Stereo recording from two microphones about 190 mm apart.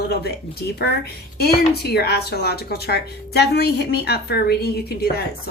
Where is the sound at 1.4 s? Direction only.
55° left (ahead or behind).